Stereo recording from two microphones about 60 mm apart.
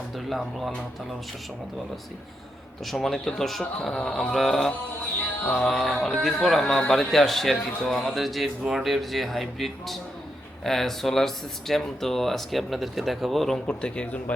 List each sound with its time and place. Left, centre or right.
0.3 s speech: centre
2.8 s speech: centre
13.7 s speech: centre